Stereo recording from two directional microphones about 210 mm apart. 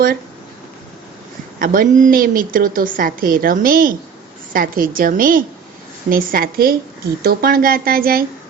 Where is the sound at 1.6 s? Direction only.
40° right (ahead or behind).